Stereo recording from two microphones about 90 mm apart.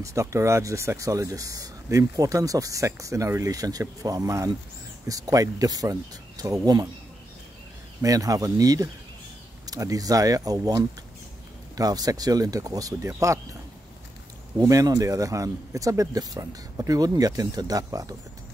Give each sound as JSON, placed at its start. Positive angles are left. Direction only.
{"t": 0.0, "sound": "speech", "side_deg": -35}
{"t": 8.0, "sound": "speech", "side_deg": -40}
{"t": 14.6, "sound": "speech", "side_deg": -40}